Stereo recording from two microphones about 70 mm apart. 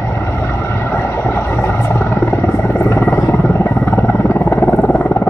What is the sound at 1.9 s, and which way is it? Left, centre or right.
Helicopter, left.